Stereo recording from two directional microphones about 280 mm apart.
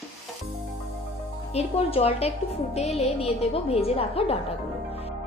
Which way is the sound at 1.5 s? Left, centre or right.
Left.